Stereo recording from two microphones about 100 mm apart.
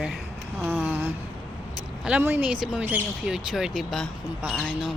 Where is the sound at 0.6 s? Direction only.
15° right (ahead or behind).